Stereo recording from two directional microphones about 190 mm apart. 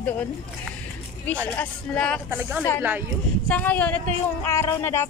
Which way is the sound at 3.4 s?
10° left (ahead or behind).